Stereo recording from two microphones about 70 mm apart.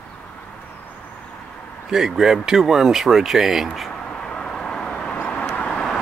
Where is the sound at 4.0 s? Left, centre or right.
Centre.